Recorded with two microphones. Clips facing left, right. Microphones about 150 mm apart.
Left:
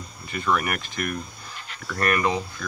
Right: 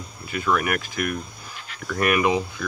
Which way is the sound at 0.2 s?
5° right (ahead or behind).